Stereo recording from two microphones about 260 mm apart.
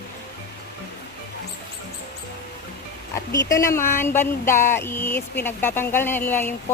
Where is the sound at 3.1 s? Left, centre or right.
Centre.